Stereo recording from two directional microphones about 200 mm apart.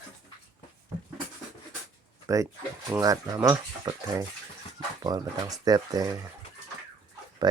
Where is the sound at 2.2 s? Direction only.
15° right (ahead or behind).